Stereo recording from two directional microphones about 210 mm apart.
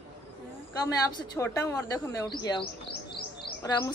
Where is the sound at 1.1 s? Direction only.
15° left (ahead or behind).